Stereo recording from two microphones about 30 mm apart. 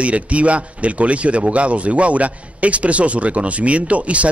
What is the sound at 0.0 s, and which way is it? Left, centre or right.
Speech, right.